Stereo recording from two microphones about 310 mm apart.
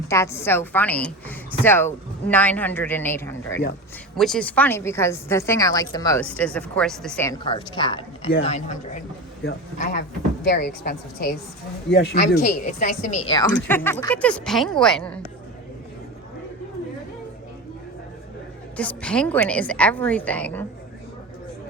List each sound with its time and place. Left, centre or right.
0.1 s a woman's voice: centre
18.8 s a woman's voice: centre